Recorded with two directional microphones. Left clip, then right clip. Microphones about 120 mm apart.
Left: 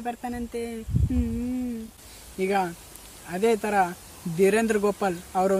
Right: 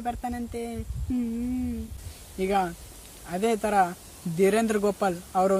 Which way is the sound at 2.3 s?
5° right (ahead or behind).